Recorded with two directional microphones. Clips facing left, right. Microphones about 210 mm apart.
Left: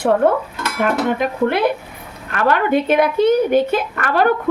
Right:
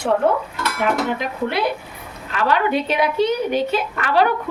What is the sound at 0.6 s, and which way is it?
A woman's voice, 50° left (ahead or behind).